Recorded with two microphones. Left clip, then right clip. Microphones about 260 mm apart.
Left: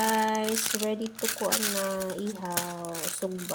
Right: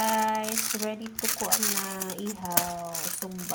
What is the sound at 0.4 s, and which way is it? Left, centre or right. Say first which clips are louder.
Crumpling: left 2 dB; centre.